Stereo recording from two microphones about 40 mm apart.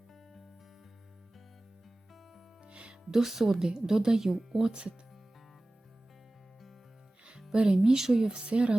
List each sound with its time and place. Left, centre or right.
2.6 s music: right
3.1 s a woman's voice: centre
4.7 s speech: right
7.5 s speech: centre
8.4 s speech: right